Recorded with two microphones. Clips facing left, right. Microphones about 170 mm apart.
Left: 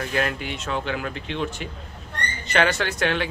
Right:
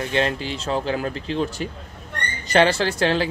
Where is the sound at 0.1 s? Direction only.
30° right (ahead or behind).